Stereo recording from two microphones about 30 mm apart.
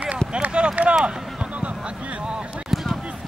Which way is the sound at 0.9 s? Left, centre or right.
Right.